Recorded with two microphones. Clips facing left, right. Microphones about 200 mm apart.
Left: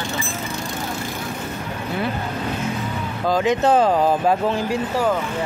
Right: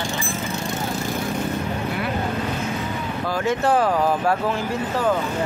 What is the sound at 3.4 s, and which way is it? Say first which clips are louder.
Speech: left 2 dB; 20° left (ahead or behind).